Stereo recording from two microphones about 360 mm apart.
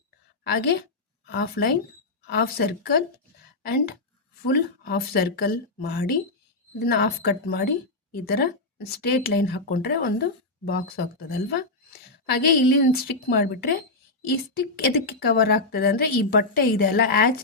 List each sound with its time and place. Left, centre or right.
0.4 s a woman's voice: left
4.5 s a woman's voice: left